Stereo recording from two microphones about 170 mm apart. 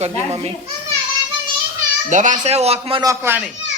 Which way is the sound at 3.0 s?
15° right (ahead or behind).